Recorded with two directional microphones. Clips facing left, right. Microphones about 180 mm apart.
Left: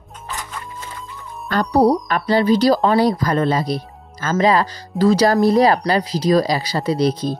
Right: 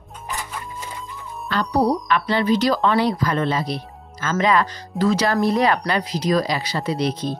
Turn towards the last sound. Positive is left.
turn(degrees=35)  # may be behind; listen again after turning